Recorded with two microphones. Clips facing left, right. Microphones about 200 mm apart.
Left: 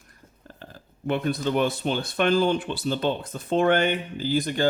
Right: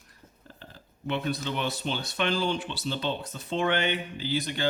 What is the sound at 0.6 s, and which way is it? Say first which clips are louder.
Speech: left 5 dB; 50° left (ahead or behind).